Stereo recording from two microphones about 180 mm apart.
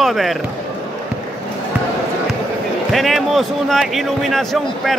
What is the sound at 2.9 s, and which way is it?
A man's voice, centre (ahead or behind).